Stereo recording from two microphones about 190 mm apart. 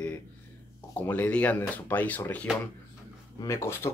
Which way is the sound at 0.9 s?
10° left (ahead or behind).